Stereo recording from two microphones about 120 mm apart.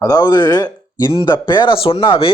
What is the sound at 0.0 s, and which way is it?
Speech, 30° left (ahead or behind).